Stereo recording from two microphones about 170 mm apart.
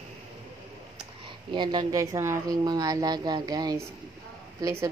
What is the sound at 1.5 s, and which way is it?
A woman's voice, 25° right (ahead or behind).